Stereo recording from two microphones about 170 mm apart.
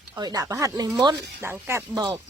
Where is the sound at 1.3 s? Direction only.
15° right (ahead or behind).